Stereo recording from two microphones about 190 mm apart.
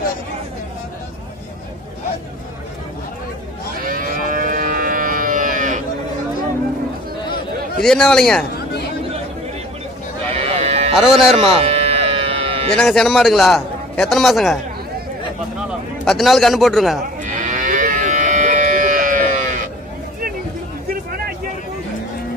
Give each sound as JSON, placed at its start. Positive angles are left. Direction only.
{"t": 3.8, "sound": "moo", "side_deg": -45}
{"t": 7.8, "sound": "a man's voice", "side_deg": 5}
{"t": 10.3, "sound": "sheep", "side_deg": -30}
{"t": 11.0, "sound": "a man's voice", "side_deg": 0}
{"t": 11.6, "sound": "music", "side_deg": -30}
{"t": 12.7, "sound": "a man's voice", "side_deg": 0}
{"t": 16.1, "sound": "a man's voice", "side_deg": 0}
{"t": 17.2, "sound": "livestock", "side_deg": -40}